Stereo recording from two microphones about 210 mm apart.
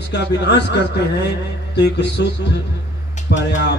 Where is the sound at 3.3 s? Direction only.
55° left (ahead or behind).